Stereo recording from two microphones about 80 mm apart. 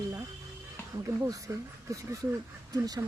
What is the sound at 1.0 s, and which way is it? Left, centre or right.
Speech, right.